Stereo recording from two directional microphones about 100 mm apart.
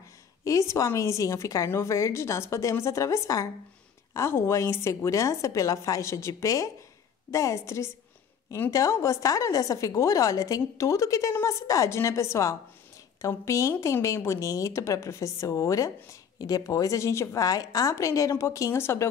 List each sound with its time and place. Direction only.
0.4 s a woman's voice: 30° left (ahead or behind)